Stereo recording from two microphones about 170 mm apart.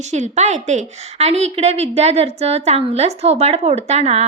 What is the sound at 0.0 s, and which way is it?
A woman's voice, 40° right (ahead or behind).